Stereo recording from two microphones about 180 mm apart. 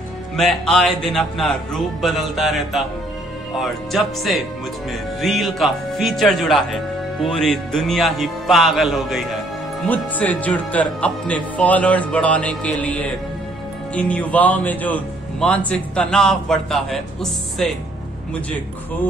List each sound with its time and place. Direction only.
0.4 s speech: 5° left (ahead or behind)